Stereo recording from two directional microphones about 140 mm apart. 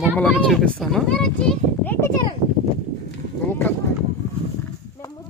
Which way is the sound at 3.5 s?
15° left (ahead or behind).